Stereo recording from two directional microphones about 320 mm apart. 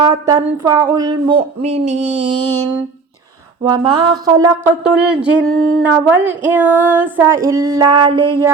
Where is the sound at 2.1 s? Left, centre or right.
Right.